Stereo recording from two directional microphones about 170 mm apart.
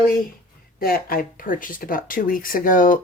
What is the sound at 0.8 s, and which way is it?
Speech, 60° left (ahead or behind).